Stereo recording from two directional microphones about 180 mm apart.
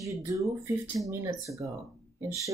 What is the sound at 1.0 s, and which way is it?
A woman's voice, 15° right (ahead or behind).